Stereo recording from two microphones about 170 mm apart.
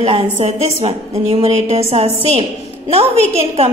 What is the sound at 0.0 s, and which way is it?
A woman's voice, 35° right (ahead or behind).